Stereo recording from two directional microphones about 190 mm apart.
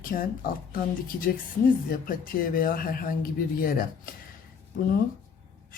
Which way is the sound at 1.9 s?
50° left (ahead or behind).